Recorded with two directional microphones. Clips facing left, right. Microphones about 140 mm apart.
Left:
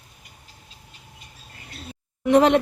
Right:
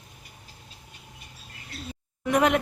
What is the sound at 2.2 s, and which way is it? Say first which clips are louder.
Speech: left 6 dB; 30° left (ahead or behind).